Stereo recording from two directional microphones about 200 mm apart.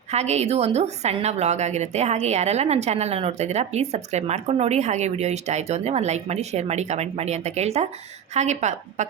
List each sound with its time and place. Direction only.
0.1 s a woman's voice: 35° right (ahead or behind)